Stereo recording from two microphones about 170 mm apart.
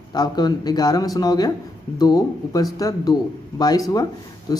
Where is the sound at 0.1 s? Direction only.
25° left (ahead or behind).